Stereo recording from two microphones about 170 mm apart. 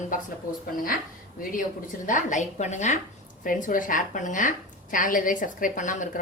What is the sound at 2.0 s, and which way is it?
A woman's voice, 45° left (ahead or behind).